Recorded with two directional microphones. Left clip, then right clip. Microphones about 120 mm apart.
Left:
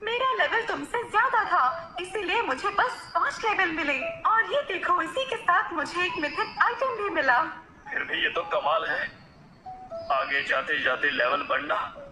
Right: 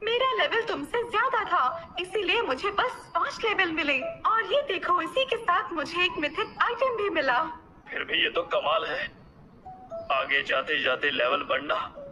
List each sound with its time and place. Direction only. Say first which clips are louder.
0.0 s a woman's voice: even; 30° right (ahead or behind)
10.1 s a man's voice: even; 30° right (ahead or behind)